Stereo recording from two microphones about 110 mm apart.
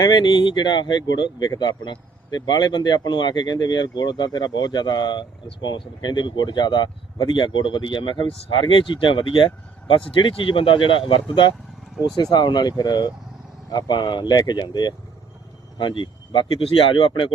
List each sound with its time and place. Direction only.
0.0 s speech: 45° left (ahead or behind)